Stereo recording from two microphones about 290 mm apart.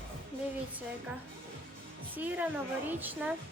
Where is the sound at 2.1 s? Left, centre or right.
Centre.